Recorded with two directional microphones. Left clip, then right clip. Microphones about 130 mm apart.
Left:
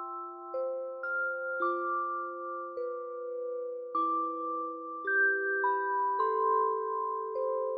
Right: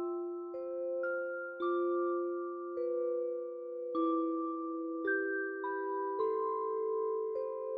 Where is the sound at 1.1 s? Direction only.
35° left (ahead or behind).